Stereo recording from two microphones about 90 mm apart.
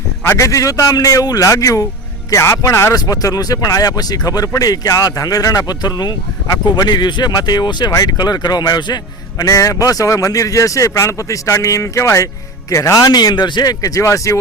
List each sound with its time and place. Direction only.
0.3 s speech: 35° left (ahead or behind)